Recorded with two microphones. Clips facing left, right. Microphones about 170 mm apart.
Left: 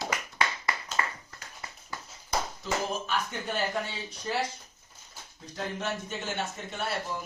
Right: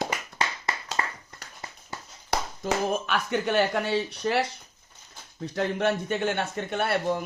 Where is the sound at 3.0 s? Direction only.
70° right (ahead or behind).